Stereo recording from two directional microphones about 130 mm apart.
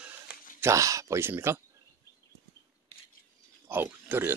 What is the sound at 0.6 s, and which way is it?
Speech, 25° right (ahead or behind).